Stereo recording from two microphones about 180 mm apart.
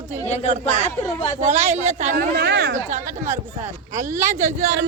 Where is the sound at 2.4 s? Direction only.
75° right (ahead or behind).